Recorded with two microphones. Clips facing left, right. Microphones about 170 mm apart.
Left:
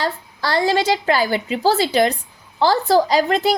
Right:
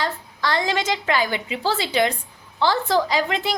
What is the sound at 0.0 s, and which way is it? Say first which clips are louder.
A woman's voice: left 2 dB; 35° left (ahead or behind).